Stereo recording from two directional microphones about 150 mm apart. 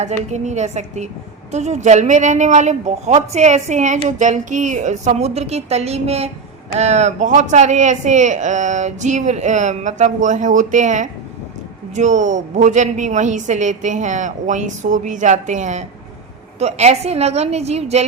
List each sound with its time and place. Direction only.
0.0 s a woman's voice: 50° right (ahead or behind)